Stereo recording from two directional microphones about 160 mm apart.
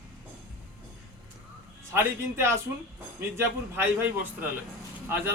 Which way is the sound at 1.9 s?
15° right (ahead or behind).